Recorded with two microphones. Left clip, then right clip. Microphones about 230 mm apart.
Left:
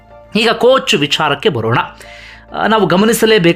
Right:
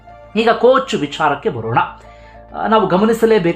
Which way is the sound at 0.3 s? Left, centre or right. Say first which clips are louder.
Left 1 dB; centre.